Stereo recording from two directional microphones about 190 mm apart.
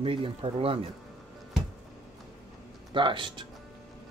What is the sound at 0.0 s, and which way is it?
Speech, 30° right (ahead or behind).